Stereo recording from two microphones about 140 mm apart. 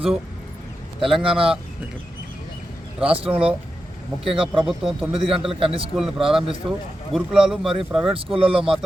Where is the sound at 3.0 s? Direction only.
40° right (ahead or behind).